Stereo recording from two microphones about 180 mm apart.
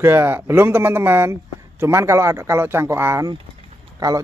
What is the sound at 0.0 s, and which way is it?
Speech, 15° right (ahead or behind).